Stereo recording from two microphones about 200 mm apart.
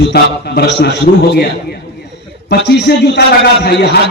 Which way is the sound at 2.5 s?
55° left (ahead or behind).